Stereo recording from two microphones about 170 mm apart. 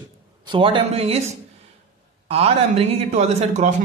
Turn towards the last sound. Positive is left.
turn(degrees=-40)  # may be behind; listen again after turning